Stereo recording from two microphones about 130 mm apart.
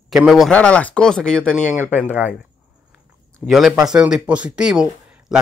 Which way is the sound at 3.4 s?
Centre (ahead or behind).